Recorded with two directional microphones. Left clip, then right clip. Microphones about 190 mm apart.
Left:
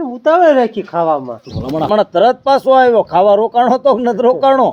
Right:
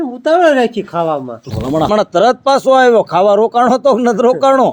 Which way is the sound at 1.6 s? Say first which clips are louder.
Right 1 dB; 30° right (ahead or behind).